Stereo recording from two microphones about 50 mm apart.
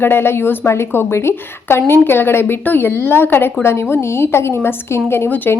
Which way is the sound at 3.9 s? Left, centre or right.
Left.